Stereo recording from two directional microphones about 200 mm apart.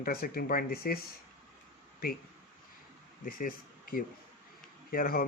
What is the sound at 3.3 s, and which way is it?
Speech, 45° left (ahead or behind).